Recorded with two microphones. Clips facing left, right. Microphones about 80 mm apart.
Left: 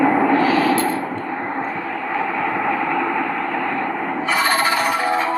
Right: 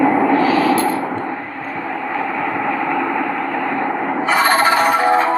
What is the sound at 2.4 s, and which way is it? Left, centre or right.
Vehicle, centre.